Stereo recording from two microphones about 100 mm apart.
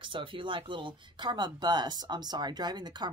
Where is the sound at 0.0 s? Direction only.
55° right (ahead or behind).